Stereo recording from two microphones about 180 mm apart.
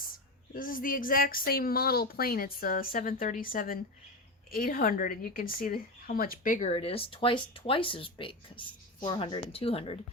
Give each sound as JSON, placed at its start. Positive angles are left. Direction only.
{"t": 0.5, "sound": "a woman's voice", "side_deg": 50}